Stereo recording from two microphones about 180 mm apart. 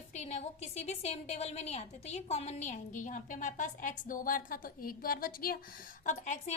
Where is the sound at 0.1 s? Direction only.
40° left (ahead or behind).